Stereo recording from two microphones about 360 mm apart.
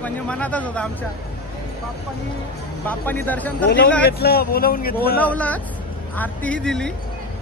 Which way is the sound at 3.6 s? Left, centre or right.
Left.